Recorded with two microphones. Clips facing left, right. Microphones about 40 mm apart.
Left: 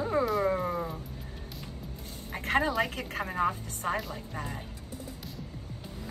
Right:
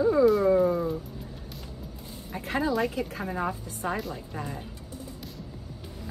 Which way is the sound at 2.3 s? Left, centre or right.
Left.